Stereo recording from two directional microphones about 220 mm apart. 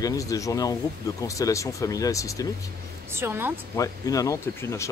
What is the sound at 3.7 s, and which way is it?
Speech, 15° left (ahead or behind).